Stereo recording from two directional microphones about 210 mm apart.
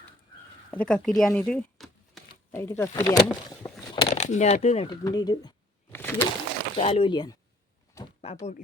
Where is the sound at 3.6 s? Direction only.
20° left (ahead or behind).